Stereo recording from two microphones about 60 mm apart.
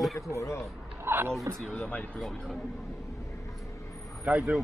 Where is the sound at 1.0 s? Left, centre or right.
Right.